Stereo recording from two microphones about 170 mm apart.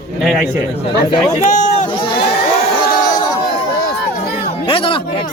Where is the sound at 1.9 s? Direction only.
30° left (ahead or behind).